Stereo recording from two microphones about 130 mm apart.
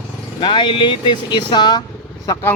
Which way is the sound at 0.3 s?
35° left (ahead or behind).